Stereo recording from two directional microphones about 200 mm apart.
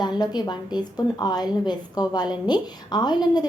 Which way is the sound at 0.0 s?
20° left (ahead or behind).